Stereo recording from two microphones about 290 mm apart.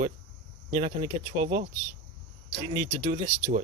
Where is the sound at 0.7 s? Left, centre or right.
Right.